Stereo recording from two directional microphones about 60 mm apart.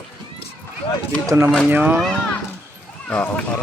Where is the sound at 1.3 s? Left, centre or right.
Right.